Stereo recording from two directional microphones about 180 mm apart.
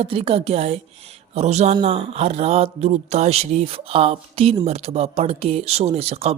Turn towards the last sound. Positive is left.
turn(degrees=-35)  # may be behind; listen again after turning